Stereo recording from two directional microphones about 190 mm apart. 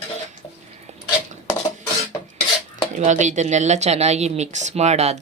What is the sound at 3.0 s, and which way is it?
Speech, 40° right (ahead or behind).